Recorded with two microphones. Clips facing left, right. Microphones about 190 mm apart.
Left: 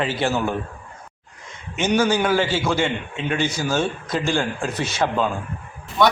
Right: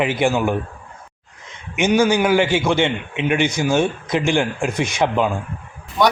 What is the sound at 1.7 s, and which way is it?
A man's voice, 10° right (ahead or behind).